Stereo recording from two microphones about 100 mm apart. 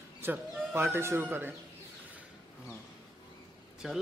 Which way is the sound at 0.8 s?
25° right (ahead or behind).